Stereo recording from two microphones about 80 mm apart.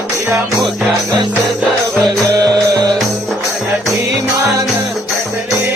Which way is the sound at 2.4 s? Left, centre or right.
Right.